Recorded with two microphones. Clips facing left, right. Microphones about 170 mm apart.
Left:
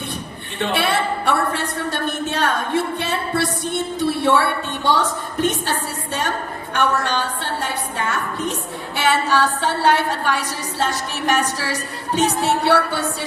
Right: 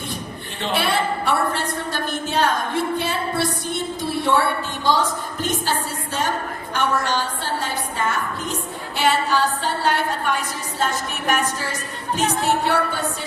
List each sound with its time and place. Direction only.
0.6 s a woman's voice: 60° left (ahead or behind)
2.0 s music: 65° left (ahead or behind)
4.0 s a sound: 65° left (ahead or behind)
4.8 s a woman's voice: 65° left (ahead or behind)
6.7 s a woman's voice: 65° left (ahead or behind)